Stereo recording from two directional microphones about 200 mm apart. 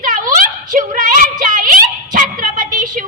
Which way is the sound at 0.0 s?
40° right (ahead or behind).